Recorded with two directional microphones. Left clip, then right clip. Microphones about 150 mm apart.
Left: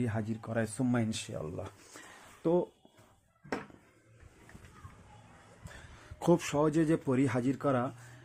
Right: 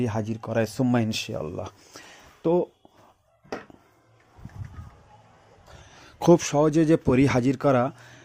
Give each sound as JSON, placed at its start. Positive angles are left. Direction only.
{"t": 0.0, "sound": "speech", "side_deg": -40}
{"t": 2.4, "sound": "speech", "side_deg": -30}
{"t": 6.1, "sound": "speech", "side_deg": -35}